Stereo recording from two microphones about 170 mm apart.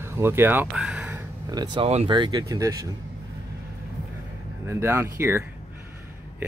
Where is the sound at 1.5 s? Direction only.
25° right (ahead or behind).